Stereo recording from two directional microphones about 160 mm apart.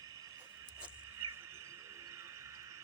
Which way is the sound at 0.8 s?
15° right (ahead or behind).